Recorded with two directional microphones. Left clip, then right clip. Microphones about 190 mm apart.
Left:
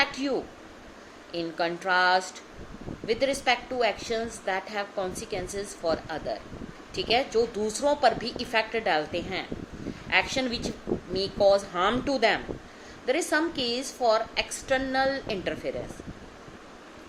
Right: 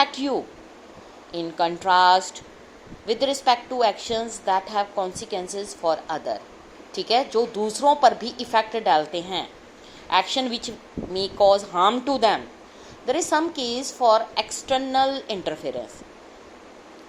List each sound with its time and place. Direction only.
0.0 s a woman's voice: 20° right (ahead or behind)